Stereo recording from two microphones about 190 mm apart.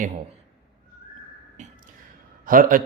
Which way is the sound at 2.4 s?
45° right (ahead or behind).